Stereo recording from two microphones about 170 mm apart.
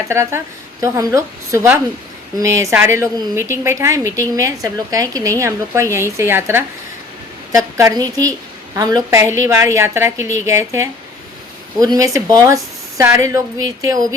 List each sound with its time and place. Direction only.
0.1 s a woman's voice: 15° right (ahead or behind)